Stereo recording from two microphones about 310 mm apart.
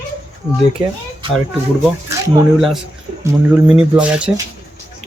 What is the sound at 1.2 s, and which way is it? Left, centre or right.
Speech, centre.